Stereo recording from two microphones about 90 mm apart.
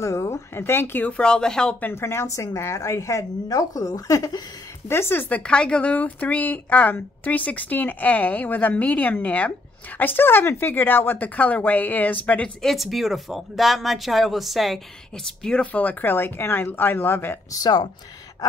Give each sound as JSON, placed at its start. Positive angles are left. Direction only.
{"t": 0.0, "sound": "speech", "side_deg": 35}
{"t": 1.8, "sound": "a woman's voice", "side_deg": 25}
{"t": 4.8, "sound": "speech", "side_deg": 30}
{"t": 12.6, "sound": "speech", "side_deg": 0}
{"t": 17.5, "sound": "speech", "side_deg": 45}